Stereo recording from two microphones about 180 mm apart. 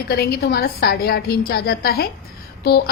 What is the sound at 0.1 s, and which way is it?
A woman's voice, 60° left (ahead or behind).